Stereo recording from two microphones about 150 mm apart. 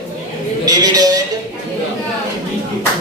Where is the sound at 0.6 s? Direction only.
25° right (ahead or behind).